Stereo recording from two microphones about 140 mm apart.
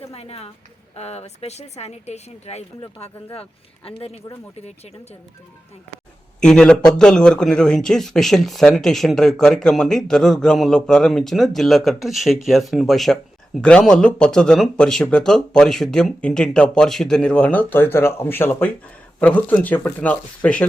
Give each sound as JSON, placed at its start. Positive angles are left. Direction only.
{"t": 0.1, "sound": "a woman's voice", "side_deg": 45}
{"t": 3.8, "sound": "speech", "side_deg": 45}
{"t": 6.4, "sound": "speech", "side_deg": 5}